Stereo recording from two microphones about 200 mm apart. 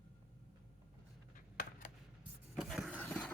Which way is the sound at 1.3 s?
45° left (ahead or behind).